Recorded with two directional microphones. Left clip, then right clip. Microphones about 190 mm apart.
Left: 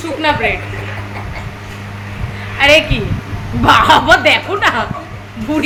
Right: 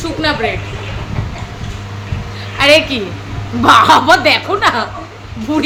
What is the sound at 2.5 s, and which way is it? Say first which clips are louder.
A woman's voice: even; 20° right (ahead or behind).